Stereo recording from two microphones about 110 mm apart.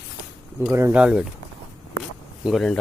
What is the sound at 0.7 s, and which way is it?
Speech, 25° right (ahead or behind).